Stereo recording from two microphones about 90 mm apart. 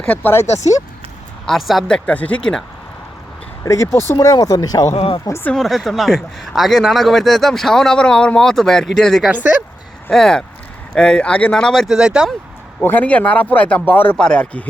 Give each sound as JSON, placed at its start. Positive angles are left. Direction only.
{"t": 0.0, "sound": "speech", "side_deg": 20}
{"t": 1.5, "sound": "a man's voice", "side_deg": 0}
{"t": 1.9, "sound": "speech", "side_deg": 15}
{"t": 3.6, "sound": "speech", "side_deg": 35}
{"t": 4.4, "sound": "speech", "side_deg": 45}
{"t": 4.9, "sound": "speech", "side_deg": 90}
{"t": 5.6, "sound": "a man's voice", "side_deg": 0}
{"t": 9.3, "sound": "speech", "side_deg": -20}
{"t": 10.1, "sound": "speech", "side_deg": 5}
{"t": 12.8, "sound": "speech", "side_deg": 20}